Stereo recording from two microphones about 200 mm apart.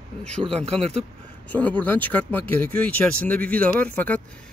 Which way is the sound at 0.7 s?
30° right (ahead or behind).